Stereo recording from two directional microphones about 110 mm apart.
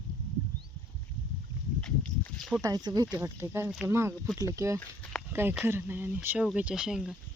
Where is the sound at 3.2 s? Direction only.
25° right (ahead or behind).